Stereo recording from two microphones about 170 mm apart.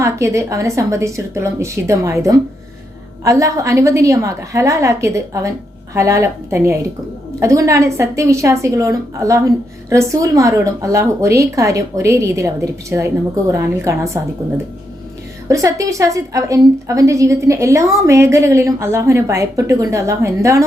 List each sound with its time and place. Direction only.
0.0 s a woman's voice: 15° right (ahead or behind)
15.4 s a woman's voice: 20° right (ahead or behind)